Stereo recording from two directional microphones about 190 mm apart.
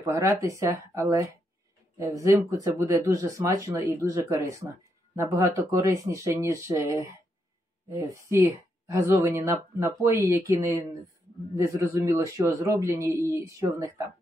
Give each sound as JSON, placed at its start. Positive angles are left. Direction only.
{"t": 0.0, "sound": "speech", "side_deg": -15}